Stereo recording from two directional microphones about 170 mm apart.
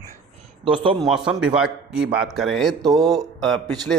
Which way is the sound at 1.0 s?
5° right (ahead or behind).